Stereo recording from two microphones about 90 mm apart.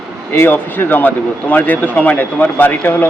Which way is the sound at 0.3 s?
25° left (ahead or behind).